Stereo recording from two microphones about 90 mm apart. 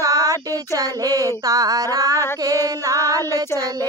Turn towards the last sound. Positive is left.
turn(degrees=-40)  # may be behind; listen again after turning